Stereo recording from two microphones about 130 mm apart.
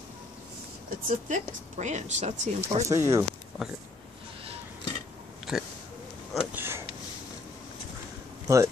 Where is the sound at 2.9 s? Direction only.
20° right (ahead or behind).